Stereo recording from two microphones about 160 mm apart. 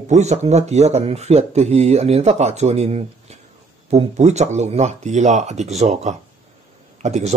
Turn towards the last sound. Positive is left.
turn(degrees=-45)  # may be behind; listen again after turning